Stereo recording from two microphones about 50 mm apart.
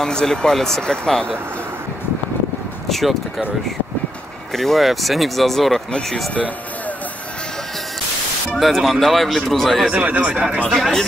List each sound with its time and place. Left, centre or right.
0.0 s speech: centre
2.9 s speech: centre
4.5 s speech: centre
8.5 s speech: centre
9.9 s speech: right
10.7 s speech: centre